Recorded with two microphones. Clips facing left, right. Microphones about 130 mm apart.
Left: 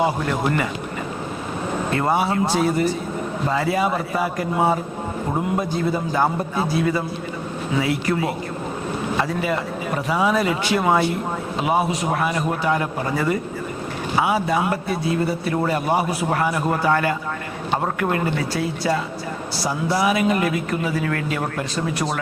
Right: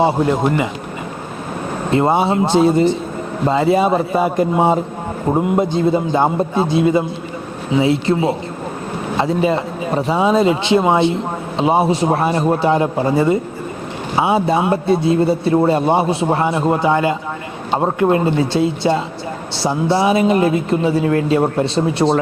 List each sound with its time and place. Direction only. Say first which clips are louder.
0.0 s speech: right 6 dB; 20° right (ahead or behind)
1.9 s speech: right 7 dB; 25° right (ahead or behind)